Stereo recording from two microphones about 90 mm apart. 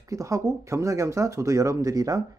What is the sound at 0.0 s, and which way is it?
Speech, 35° right (ahead or behind).